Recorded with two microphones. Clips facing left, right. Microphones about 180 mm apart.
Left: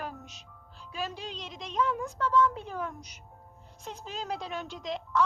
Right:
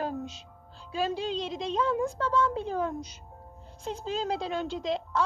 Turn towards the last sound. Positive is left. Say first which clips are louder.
# right 1 dB
turn(degrees=-30)  # may be behind; listen again after turning